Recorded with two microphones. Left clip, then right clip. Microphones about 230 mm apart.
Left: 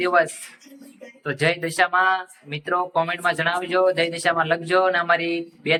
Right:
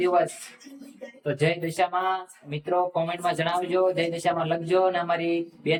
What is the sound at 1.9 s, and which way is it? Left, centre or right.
Speech, left.